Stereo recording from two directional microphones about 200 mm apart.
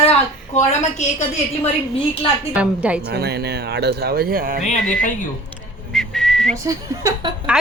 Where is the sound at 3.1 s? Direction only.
50° right (ahead or behind).